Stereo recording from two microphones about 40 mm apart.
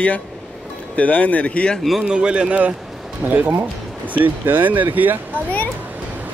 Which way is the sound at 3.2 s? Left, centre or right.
Right.